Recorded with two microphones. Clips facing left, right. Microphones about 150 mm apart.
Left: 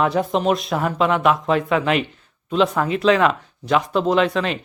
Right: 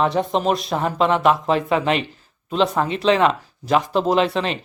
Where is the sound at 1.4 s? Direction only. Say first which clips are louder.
Even; 30° right (ahead or behind).